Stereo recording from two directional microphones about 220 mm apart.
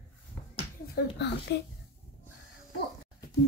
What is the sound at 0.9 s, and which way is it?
Speech, 50° left (ahead or behind).